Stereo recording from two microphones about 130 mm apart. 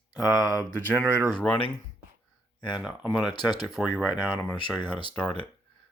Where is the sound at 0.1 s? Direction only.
30° left (ahead or behind).